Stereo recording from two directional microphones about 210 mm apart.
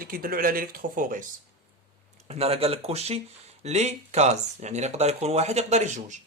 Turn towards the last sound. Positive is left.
turn(degrees=-35)  # may be behind; listen again after turning